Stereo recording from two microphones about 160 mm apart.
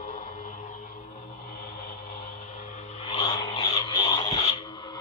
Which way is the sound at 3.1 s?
30° left (ahead or behind).